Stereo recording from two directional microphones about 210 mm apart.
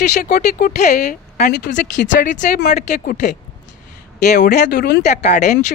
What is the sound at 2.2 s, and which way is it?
Speech, 40° left (ahead or behind).